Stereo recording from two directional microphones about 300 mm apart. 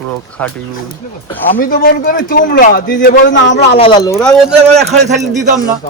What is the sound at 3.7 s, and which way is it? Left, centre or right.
Speech, centre.